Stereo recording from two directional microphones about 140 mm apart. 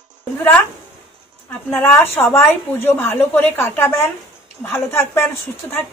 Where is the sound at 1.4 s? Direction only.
15° left (ahead or behind).